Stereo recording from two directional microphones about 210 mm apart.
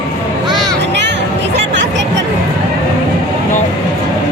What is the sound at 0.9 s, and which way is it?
Music, 55° right (ahead or behind).